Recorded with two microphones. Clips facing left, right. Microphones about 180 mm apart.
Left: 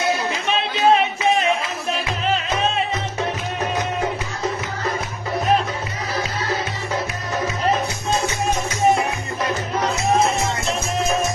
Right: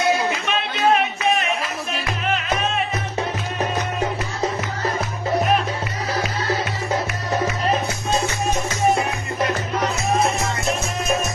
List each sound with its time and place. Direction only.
0.4 s music: 30° left (ahead or behind)